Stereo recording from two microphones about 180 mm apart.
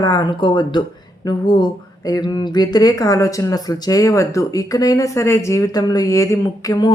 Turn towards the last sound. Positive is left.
turn(degrees=20)  # may be behind; listen again after turning